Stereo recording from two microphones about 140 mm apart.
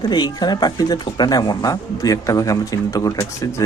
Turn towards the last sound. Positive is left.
turn(degrees=25)  # may be behind; listen again after turning